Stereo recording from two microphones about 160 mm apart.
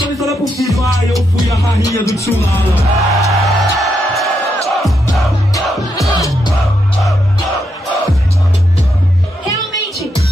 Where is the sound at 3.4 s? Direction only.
Centre (ahead or behind).